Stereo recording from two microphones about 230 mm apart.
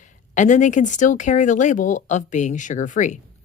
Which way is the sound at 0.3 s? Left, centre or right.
Left.